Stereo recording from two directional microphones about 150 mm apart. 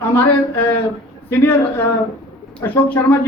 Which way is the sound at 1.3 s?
15° left (ahead or behind).